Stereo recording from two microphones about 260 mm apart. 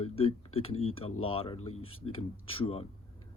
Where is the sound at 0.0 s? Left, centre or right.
Left.